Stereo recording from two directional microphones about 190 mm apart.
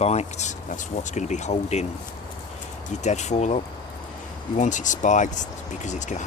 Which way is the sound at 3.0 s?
35° left (ahead or behind).